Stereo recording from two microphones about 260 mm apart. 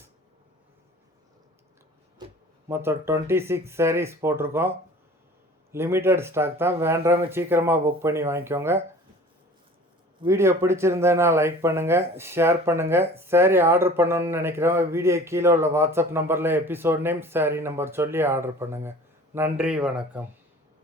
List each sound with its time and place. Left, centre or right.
2.6 s speech: centre
5.7 s speech: centre
10.2 s speech: centre